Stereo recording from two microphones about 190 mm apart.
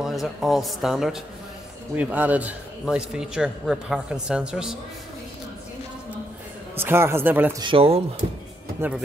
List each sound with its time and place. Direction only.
0.0 s a man's voice: centre (ahead or behind)
6.7 s a man's voice: 10° right (ahead or behind)
7.6 s speech: 30° right (ahead or behind)
8.8 s a man's voice: 10° right (ahead or behind)